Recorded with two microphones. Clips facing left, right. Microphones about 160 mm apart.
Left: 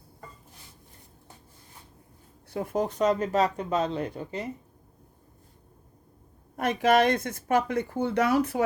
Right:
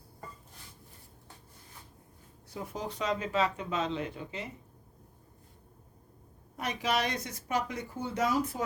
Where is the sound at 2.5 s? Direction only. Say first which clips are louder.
Left 10 dB; 55° left (ahead or behind).